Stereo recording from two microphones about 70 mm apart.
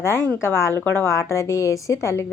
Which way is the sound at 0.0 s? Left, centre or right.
Left.